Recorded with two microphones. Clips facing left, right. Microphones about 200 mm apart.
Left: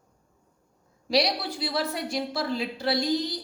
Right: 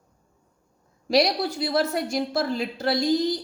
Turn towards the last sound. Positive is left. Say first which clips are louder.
# right 4 dB
turn(degrees=-45)  # may be behind; listen again after turning